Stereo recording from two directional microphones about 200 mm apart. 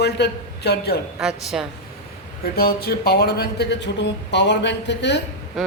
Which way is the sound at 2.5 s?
50° left (ahead or behind).